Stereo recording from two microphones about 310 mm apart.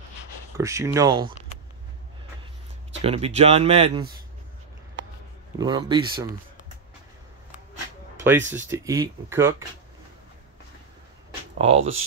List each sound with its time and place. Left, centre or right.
0.6 s speech: centre
3.0 s speech: centre
5.6 s speech: centre
8.5 s speech: centre
11.5 s speech: centre